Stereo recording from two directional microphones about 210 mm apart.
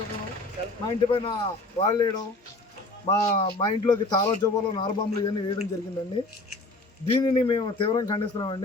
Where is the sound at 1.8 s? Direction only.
20° left (ahead or behind).